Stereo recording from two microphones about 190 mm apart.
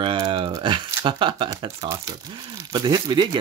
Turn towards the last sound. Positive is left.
turn(degrees=-25)  # may be behind; listen again after turning